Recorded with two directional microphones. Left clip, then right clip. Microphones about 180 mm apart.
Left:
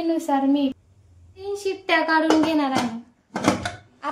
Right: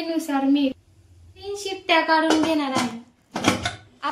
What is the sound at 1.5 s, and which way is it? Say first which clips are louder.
Speech: even; 60° left (ahead or behind).